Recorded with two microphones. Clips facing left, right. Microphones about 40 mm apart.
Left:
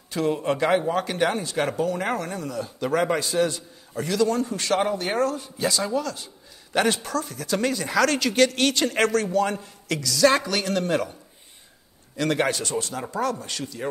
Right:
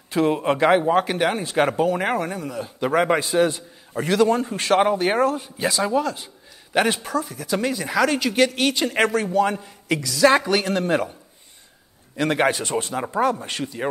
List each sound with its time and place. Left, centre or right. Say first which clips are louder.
0.1 s speech: right 4 dB; right
4.0 s a man's voice: right 4 dB; right
4.3 s speech: right 4 dB; right
6.7 s speech: right 2 dB; centre
12.2 s speech: right 3 dB; centre